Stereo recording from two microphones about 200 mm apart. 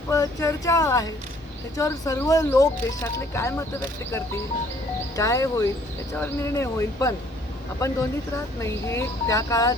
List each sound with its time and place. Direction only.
0.1 s speech: 15° left (ahead or behind)
5.1 s speech: 15° left (ahead or behind)